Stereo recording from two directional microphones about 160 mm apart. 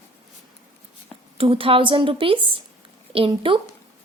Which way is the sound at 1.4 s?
35° right (ahead or behind).